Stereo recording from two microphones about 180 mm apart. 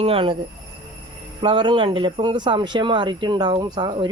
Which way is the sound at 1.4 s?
30° right (ahead or behind).